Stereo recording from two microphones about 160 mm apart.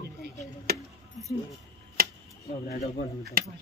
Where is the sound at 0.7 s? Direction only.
70° right (ahead or behind).